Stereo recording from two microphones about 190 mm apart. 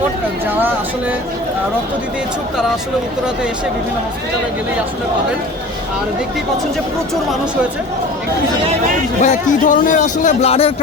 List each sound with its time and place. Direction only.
9.2 s a man's voice: 45° left (ahead or behind)